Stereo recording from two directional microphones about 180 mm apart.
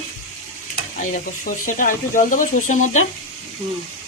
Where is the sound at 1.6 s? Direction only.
45° left (ahead or behind).